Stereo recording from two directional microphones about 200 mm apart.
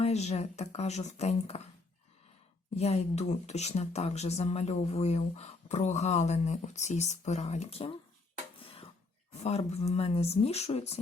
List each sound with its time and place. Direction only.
0.0 s speech: 35° left (ahead or behind)
2.7 s speech: 35° left (ahead or behind)
8.5 s a sound: 25° left (ahead or behind)
9.3 s speech: 30° left (ahead or behind)